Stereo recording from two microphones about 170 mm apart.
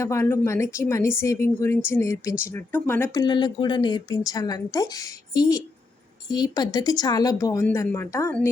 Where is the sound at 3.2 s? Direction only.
25° left (ahead or behind).